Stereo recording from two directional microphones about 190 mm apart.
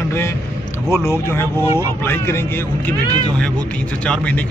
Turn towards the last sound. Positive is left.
turn(degrees=5)  # may be behind; listen again after turning